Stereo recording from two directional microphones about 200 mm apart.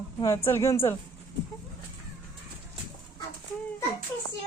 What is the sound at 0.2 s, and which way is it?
Speech, 15° left (ahead or behind).